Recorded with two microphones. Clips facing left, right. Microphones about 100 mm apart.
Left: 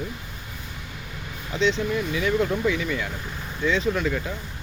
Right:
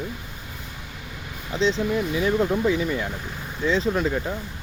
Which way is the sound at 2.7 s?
30° right (ahead or behind).